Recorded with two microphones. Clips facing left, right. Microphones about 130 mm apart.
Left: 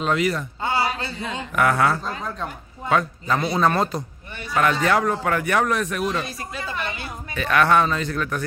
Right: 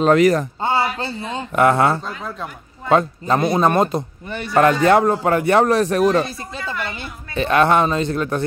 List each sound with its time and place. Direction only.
0.0 s a man's voice: 45° right (ahead or behind)
0.6 s a sound: 30° right (ahead or behind)
0.9 s a man's voice: 30° right (ahead or behind)
4.6 s a man's voice: 35° right (ahead or behind)
6.6 s a woman's voice: 20° left (ahead or behind)
7.3 s a man's voice: 25° right (ahead or behind)